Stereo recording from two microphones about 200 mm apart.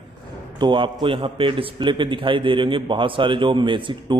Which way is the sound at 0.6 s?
25° right (ahead or behind).